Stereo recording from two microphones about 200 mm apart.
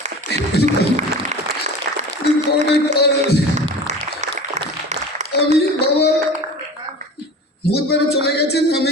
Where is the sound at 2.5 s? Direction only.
55° left (ahead or behind).